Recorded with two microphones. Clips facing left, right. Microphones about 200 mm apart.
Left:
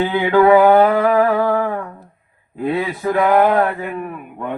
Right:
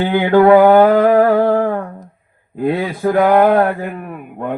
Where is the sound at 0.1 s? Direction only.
50° right (ahead or behind).